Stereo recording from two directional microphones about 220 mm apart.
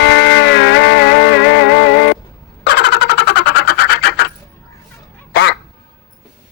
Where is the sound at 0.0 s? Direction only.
55° left (ahead or behind).